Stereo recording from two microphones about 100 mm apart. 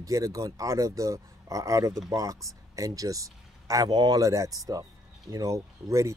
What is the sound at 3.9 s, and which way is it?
Speech, 50° right (ahead or behind).